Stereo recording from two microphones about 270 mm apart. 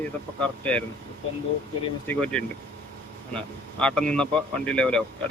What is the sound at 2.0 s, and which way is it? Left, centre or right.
Speech, centre.